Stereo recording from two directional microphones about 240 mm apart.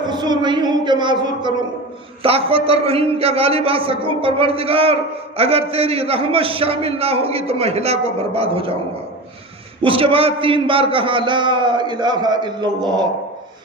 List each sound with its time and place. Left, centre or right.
0.0 s a man's voice: centre
9.8 s a man's voice: right